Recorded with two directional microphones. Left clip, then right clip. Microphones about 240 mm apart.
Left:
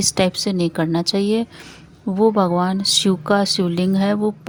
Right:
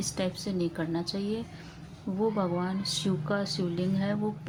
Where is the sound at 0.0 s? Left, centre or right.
Left.